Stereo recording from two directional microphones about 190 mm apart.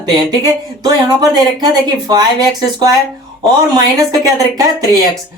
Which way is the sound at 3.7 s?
20° right (ahead or behind).